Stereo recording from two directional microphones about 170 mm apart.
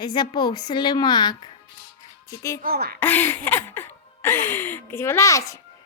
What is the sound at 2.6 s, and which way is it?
Speech, 65° right (ahead or behind).